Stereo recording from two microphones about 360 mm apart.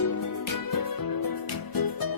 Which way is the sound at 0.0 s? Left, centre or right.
Left.